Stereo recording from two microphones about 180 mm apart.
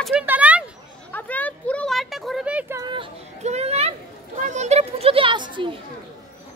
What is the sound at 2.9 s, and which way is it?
Speech, 30° right (ahead or behind).